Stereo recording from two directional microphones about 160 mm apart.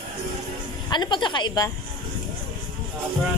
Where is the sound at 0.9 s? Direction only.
30° left (ahead or behind).